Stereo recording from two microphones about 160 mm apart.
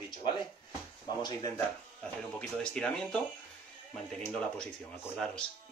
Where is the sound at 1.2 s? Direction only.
20° left (ahead or behind).